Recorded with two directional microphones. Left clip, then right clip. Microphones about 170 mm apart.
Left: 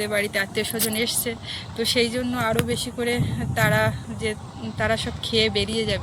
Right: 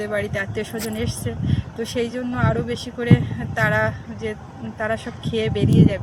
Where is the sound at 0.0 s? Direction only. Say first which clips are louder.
Left 1 dB; 5° right (ahead or behind).